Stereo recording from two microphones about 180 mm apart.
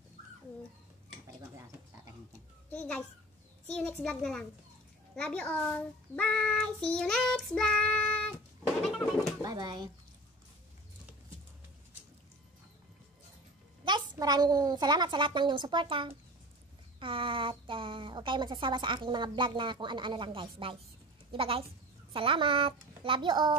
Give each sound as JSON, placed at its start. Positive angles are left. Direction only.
{"t": 2.7, "sound": "a child's voice", "side_deg": 5}
{"t": 3.7, "sound": "child singing", "side_deg": 5}
{"t": 9.4, "sound": "a woman's voice", "side_deg": -25}
{"t": 13.8, "sound": "a woman's voice", "side_deg": -25}